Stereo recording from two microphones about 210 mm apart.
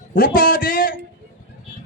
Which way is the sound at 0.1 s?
45° left (ahead or behind).